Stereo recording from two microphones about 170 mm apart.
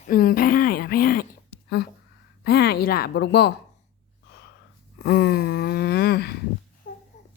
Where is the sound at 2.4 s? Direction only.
70° left (ahead or behind).